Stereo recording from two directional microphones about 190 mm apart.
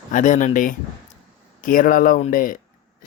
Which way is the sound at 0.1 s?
45° left (ahead or behind).